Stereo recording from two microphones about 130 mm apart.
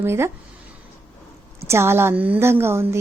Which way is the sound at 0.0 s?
20° right (ahead or behind).